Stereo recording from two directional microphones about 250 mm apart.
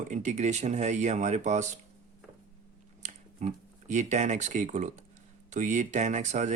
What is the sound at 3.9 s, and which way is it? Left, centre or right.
Speech, right.